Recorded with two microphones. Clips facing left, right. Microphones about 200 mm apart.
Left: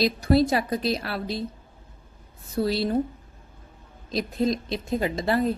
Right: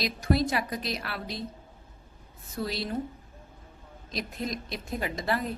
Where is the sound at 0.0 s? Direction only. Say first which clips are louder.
Left 6 dB; 30° left (ahead or behind).